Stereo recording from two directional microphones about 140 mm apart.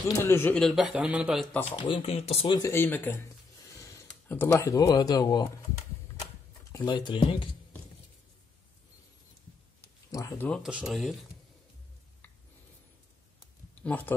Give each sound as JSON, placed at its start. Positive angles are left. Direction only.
{"t": 0.2, "sound": "speech", "side_deg": 15}
{"t": 0.6, "sound": "speech", "side_deg": 0}
{"t": 1.6, "sound": "speech", "side_deg": 40}
{"t": 2.5, "sound": "speech", "side_deg": 20}
{"t": 6.7, "sound": "speech", "side_deg": 35}
{"t": 10.1, "sound": "speech", "side_deg": 15}
{"t": 10.5, "sound": "speech", "side_deg": -5}
{"t": 13.8, "sound": "speech", "side_deg": 10}